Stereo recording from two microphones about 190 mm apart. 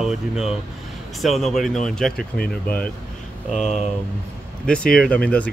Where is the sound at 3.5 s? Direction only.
40° left (ahead or behind).